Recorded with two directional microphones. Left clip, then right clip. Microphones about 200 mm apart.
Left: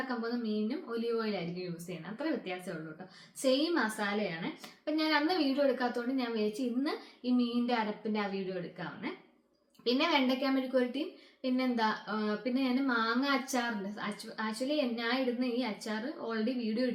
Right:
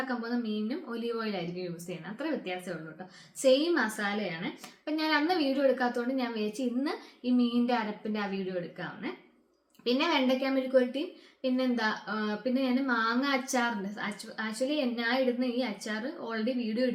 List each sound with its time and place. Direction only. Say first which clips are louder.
0.2 s speech: right 1 dB; 5° right (ahead or behind)